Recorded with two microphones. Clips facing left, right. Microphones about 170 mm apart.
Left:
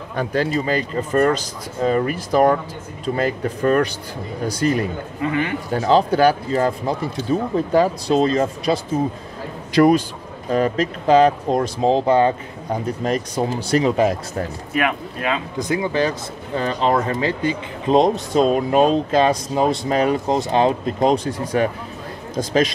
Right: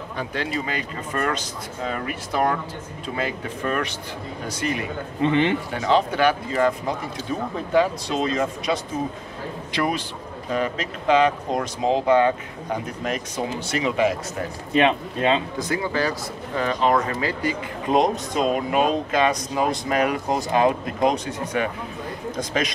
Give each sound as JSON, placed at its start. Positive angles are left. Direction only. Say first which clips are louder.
{"t": 0.1, "sound": "speech", "louder": "left 7 dB", "side_deg": 45}
{"t": 5.2, "sound": "speech", "louder": "right 2 dB", "side_deg": -25}
{"t": 5.7, "sound": "a man's voice", "louder": "left 4 dB", "side_deg": 35}
{"t": 14.7, "sound": "speech", "louder": "right 4 dB", "side_deg": -25}
{"t": 15.7, "sound": "speech", "louder": "left 4 dB", "side_deg": 20}
{"t": 16.5, "sound": "speech", "louder": "left 2 dB", "side_deg": 30}